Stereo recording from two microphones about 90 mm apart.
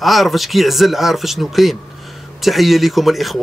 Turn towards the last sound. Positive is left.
turn(degrees=0)  # may be behind; listen again after turning